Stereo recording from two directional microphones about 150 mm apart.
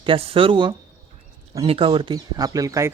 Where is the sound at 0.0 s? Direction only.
40° right (ahead or behind).